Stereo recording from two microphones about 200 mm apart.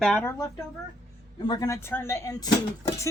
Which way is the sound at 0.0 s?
5° left (ahead or behind).